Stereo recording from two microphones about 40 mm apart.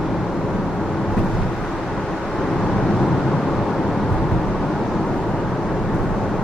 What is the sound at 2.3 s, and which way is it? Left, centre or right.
Vehicle, centre.